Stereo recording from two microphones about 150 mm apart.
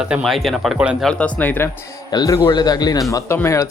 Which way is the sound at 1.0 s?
5° left (ahead or behind).